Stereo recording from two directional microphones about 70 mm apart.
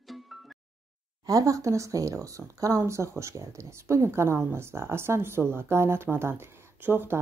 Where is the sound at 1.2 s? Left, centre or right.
Right.